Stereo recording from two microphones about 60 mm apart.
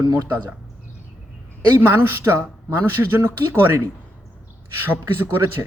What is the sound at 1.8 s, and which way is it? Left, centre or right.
Speech, right.